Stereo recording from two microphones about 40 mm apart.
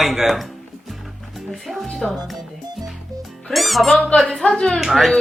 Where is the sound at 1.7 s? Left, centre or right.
Centre.